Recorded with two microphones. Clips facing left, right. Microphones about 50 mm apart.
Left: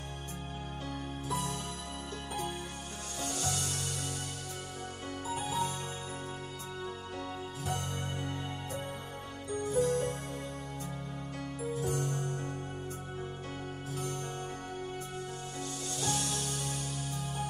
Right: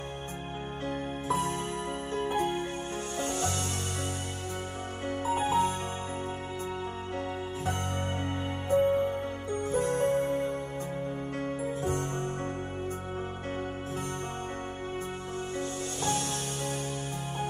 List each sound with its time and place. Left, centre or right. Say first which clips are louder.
0.8 s music: right 7 dB; right
5.0 s music: right 9 dB; right
8.6 s music: right 15 dB; right
16.0 s music: right 3 dB; right